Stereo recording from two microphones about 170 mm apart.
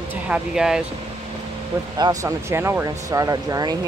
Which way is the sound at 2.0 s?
20° right (ahead or behind).